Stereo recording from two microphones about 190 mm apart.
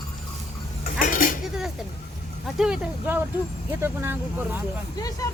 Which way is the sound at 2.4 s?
5° right (ahead or behind).